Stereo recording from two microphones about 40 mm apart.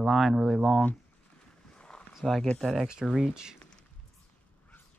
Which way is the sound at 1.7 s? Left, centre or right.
Left.